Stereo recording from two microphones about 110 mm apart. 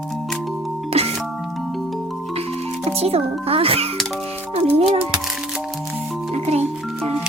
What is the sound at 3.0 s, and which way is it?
Speech, 65° right (ahead or behind).